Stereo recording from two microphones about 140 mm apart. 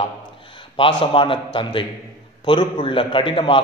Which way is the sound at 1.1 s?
35° left (ahead or behind).